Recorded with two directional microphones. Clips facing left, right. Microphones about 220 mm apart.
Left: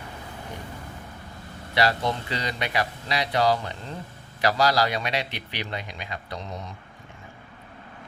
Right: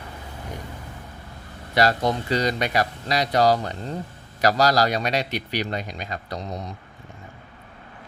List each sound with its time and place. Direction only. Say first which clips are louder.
1.7 s a man's voice: right 3 dB; 45° right (ahead or behind)